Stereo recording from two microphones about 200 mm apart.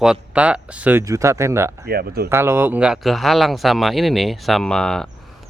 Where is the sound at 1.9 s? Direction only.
50° right (ahead or behind).